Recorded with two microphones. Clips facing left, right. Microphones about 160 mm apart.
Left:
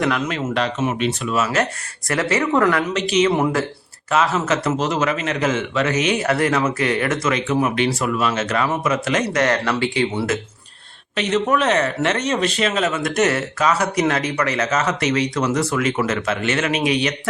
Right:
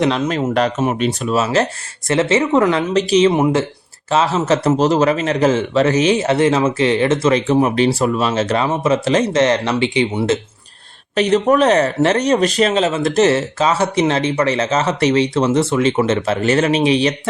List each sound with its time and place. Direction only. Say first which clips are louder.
0.3 s a man's voice: right 5 dB; 40° right (ahead or behind); by 2.8 s 20° right (ahead or behind)
2.9 s a man's voice: right 5 dB; 35° right (ahead or behind)
11.1 s a man's voice: right 5 dB; 40° right (ahead or behind)